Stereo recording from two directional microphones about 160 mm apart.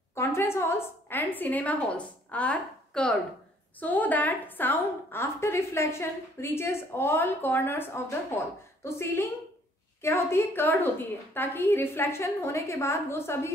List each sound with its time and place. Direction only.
0.1 s a woman's voice: 15° left (ahead or behind)